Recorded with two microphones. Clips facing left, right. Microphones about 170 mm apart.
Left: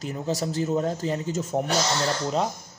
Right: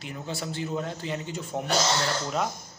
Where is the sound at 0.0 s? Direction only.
40° left (ahead or behind).